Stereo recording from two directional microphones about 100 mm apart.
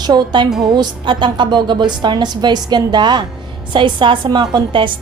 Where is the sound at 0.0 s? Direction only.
45° right (ahead or behind).